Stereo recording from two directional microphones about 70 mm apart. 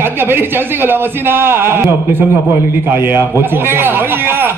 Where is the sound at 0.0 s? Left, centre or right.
Right.